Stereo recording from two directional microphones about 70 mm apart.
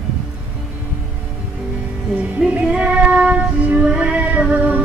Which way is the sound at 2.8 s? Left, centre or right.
Centre.